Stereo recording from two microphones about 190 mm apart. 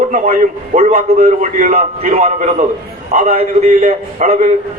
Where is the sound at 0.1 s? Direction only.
45° right (ahead or behind).